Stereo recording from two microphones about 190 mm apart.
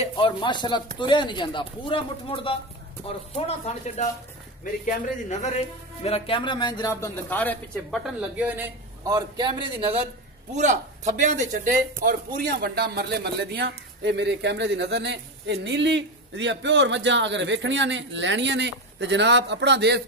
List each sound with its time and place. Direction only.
0.0 s speech: 25° left (ahead or behind)
6.0 s a man's voice: 30° left (ahead or behind); by 8.6 s 5° right (ahead or behind)
9.0 s a man's voice: 20° right (ahead or behind)
10.5 s speech: 40° right (ahead or behind); by 20.0 s 65° right (ahead or behind)